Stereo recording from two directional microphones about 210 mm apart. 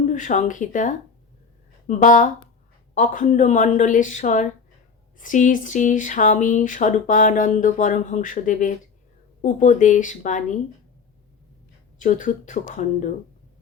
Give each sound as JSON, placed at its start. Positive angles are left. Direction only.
{"t": 0.1, "sound": "speech", "side_deg": 35}
{"t": 11.9, "sound": "speech", "side_deg": 40}